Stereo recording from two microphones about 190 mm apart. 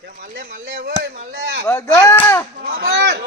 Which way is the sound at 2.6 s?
55° right (ahead or behind).